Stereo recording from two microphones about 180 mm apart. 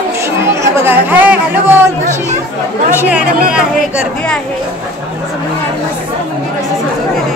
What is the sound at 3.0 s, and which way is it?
Speech, 5° right (ahead or behind).